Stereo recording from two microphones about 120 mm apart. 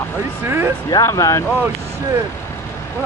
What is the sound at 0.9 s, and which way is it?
Speech, 30° left (ahead or behind).